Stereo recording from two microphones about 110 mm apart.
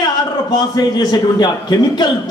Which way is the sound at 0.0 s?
40° left (ahead or behind).